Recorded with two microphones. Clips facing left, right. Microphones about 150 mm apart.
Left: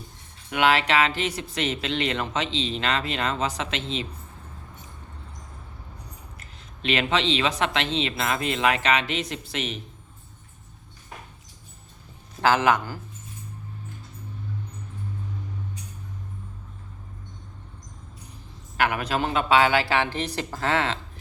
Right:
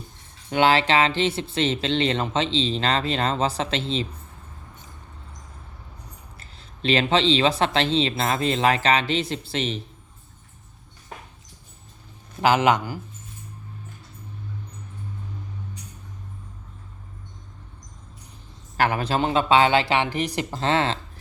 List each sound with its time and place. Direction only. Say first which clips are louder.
0.5 s a woman's voice: right 2 dB; 30° right (ahead or behind)
6.4 s speech: right 4 dB; 30° right (ahead or behind)
12.4 s a man's voice: right 2 dB; 15° right (ahead or behind)
18.8 s a woman's voice: right 2 dB; 30° right (ahead or behind)